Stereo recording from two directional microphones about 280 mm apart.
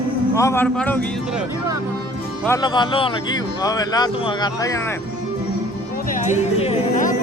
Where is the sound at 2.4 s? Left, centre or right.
Centre.